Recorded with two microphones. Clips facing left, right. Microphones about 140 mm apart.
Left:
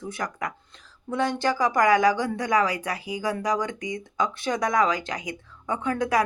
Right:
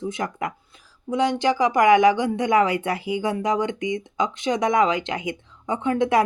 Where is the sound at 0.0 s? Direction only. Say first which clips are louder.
Right 4 dB; 25° right (ahead or behind).